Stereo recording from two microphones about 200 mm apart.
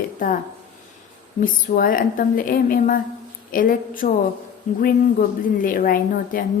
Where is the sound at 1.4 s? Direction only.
45° left (ahead or behind).